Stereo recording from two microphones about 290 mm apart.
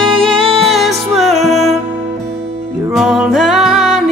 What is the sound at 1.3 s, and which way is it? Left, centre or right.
Music, right.